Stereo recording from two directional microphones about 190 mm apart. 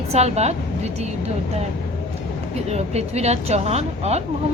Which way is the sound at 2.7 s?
35° right (ahead or behind).